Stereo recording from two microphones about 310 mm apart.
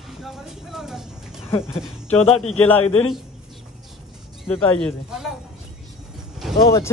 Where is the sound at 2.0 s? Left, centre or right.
Centre.